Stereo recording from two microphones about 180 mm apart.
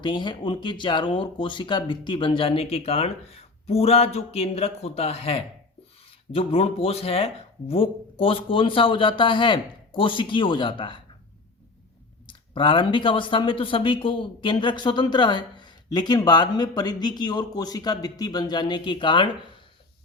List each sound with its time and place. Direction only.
0.0 s speech: 25° left (ahead or behind)
12.2 s speech: 25° left (ahead or behind)